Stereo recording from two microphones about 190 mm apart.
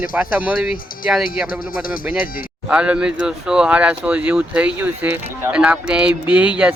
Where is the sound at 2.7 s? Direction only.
5° right (ahead or behind).